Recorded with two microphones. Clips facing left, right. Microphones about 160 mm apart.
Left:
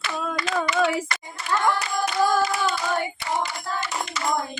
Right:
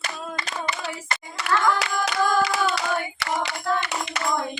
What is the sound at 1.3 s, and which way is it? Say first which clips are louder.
Clapping: right 1 dB; 75° right (ahead or behind).